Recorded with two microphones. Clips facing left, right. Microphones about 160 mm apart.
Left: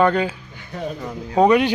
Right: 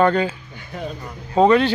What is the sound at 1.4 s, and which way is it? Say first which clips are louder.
Speech: even; 15° left (ahead or behind).